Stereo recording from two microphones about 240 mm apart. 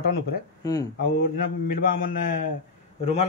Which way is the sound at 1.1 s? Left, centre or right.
Left.